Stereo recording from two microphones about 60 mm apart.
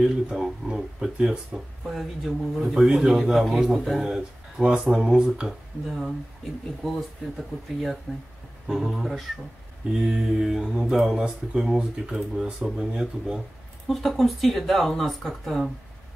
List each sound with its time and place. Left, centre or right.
0.0 s a man's voice: centre
8.1 s a man's voice: centre
8.9 s a man's voice: centre
13.8 s a man's voice: centre